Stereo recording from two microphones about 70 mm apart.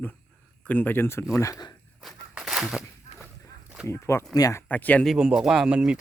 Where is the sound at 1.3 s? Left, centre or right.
Left.